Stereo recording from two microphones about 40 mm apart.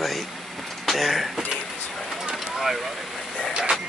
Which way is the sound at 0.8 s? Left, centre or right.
Centre.